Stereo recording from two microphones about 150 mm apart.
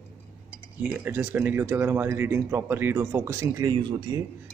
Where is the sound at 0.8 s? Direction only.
10° right (ahead or behind).